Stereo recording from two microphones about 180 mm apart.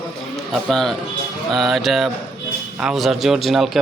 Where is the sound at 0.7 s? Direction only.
Centre (ahead or behind).